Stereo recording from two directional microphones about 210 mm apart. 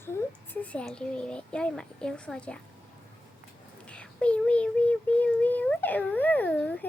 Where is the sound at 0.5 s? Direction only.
5° left (ahead or behind).